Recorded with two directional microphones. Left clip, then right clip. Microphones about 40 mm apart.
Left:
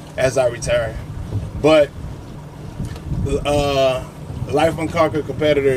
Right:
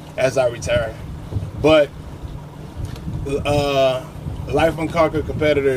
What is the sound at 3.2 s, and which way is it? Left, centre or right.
Speech, centre.